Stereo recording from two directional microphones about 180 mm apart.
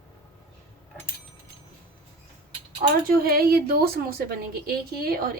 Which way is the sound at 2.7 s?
55° right (ahead or behind).